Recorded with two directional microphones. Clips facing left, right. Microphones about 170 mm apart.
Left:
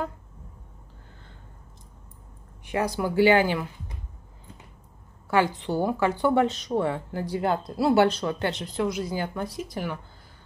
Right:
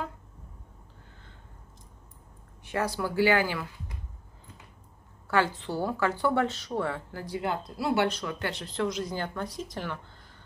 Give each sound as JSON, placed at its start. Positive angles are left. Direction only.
{"t": 2.6, "sound": "speech", "side_deg": 15}
{"t": 5.3, "sound": "a woman's voice", "side_deg": 15}
{"t": 7.3, "sound": "a woman's voice", "side_deg": 35}